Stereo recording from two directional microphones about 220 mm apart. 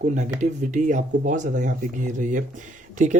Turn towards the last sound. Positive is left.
turn(degrees=-35)  # may be behind; listen again after turning